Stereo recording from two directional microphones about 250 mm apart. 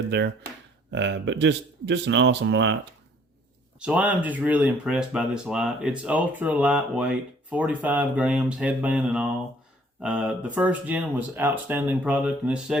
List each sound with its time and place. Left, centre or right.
0.9 s speech: right
3.8 s speech: centre